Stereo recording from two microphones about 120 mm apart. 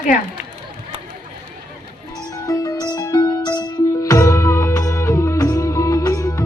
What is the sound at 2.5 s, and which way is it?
Music, 30° left (ahead or behind).